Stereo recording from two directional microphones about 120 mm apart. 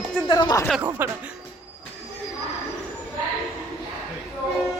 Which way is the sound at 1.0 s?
15° right (ahead or behind).